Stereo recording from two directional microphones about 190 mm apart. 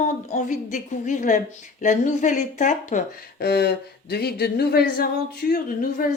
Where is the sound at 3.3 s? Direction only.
55° left (ahead or behind).